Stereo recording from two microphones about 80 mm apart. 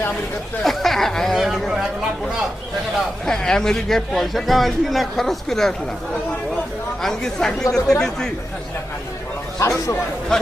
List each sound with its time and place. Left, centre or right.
0.6 s speech: centre
3.2 s speech: centre
7.0 s speech: centre
9.6 s speech: left
10.3 s speech: centre